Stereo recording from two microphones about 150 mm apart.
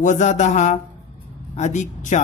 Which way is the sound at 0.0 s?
55° left (ahead or behind).